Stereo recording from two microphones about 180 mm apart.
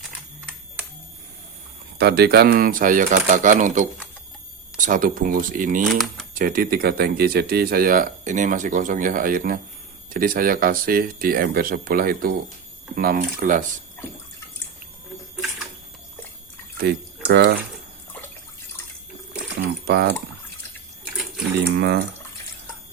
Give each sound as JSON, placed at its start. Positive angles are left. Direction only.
{"t": 2.0, "sound": "speech", "side_deg": -65}
{"t": 16.7, "sound": "speech", "side_deg": -65}
{"t": 19.5, "sound": "speech", "side_deg": -65}
{"t": 21.8, "sound": "speech", "side_deg": -65}